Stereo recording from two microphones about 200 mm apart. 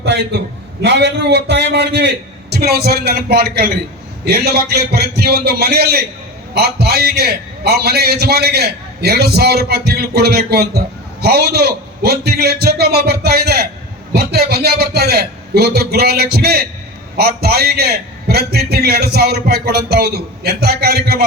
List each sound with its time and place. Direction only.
0.8 s a man's voice: 60° right (ahead or behind)